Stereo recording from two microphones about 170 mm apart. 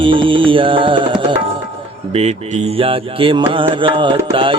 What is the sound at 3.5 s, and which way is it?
Mantra, 30° right (ahead or behind).